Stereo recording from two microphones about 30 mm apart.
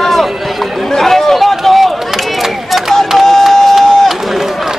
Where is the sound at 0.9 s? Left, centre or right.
Centre.